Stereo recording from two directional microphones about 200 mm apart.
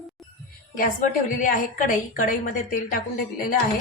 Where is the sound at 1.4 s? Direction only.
40° left (ahead or behind).